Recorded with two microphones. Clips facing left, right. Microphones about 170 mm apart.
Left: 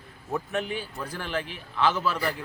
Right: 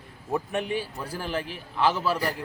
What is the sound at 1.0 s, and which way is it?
Speech, 30° right (ahead or behind).